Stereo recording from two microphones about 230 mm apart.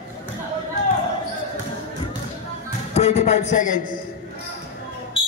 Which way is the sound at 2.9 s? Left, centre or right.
Left.